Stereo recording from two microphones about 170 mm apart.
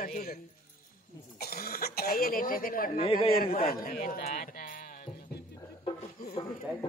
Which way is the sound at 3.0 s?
35° left (ahead or behind).